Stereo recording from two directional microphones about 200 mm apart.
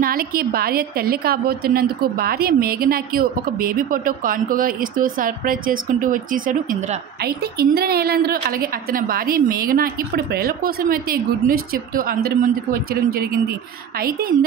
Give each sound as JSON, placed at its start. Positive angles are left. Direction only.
{"t": 0.0, "sound": "a woman's voice", "side_deg": -45}